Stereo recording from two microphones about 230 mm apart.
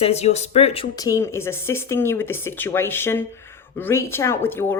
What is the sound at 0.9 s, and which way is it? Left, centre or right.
Speech, centre.